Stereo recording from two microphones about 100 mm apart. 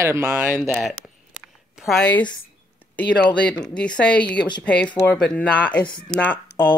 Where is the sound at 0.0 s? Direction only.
25° right (ahead or behind).